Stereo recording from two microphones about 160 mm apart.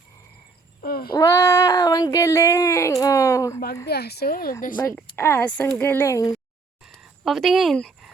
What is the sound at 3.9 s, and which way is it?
Speech, 90° left.